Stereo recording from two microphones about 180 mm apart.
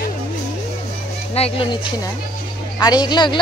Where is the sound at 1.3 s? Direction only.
30° left (ahead or behind).